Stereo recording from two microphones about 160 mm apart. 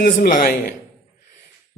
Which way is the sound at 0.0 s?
60° left (ahead or behind).